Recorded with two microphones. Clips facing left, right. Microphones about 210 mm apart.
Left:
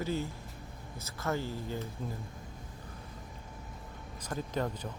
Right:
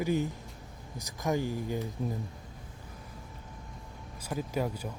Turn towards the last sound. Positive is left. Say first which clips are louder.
# right 2 dB
turn(degrees=-10)  # may be behind; listen again after turning